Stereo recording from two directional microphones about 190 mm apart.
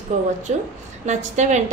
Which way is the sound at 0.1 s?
40° right (ahead or behind).